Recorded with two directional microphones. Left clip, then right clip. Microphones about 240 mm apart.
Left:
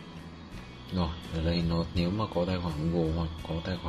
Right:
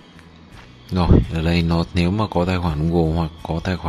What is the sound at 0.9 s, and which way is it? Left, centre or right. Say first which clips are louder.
A man's voice: right 15 dB; right.